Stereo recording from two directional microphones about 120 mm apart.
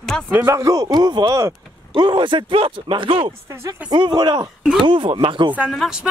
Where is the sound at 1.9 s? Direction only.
40° right (ahead or behind).